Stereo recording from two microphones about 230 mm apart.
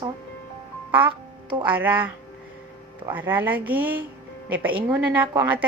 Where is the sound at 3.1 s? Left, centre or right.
Centre.